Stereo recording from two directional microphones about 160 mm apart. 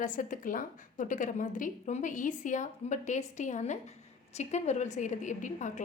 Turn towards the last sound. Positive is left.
turn(degrees=50)  # may be behind; listen again after turning